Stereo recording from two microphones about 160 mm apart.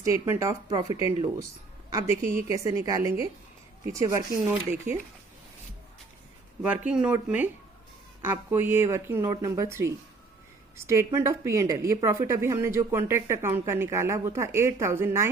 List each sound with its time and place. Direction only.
0.0 s a woman's voice: 20° right (ahead or behind)
6.6 s a woman's voice: 5° right (ahead or behind)